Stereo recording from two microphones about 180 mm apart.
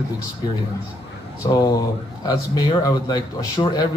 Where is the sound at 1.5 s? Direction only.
20° left (ahead or behind).